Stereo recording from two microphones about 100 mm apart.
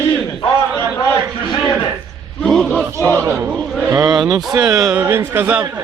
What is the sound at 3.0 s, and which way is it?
Speech, 30° right (ahead or behind).